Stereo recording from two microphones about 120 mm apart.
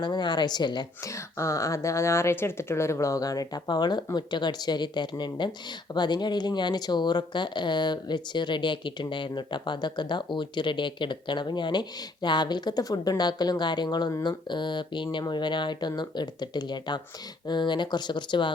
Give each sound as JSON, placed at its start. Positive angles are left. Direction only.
{"t": 0.0, "sound": "speech", "side_deg": 40}
{"t": 1.0, "sound": "speech", "side_deg": 25}